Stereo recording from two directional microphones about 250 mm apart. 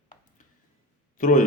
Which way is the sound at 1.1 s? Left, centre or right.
Left.